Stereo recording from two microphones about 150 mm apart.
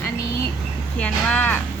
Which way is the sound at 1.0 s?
10° left (ahead or behind).